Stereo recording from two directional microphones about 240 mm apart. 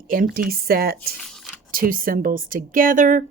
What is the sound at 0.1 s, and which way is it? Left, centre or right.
A woman's voice, right.